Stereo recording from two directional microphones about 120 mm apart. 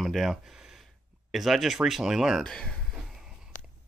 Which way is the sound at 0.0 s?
Centre (ahead or behind).